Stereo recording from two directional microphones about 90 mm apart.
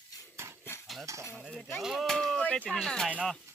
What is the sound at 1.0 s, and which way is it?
Cutlery, 35° right (ahead or behind).